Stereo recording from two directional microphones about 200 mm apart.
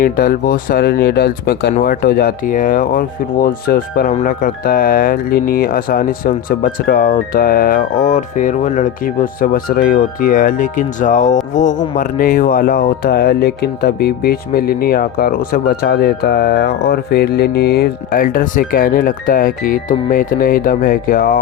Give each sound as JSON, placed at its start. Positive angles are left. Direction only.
{"t": 0.0, "sound": "speech", "side_deg": 45}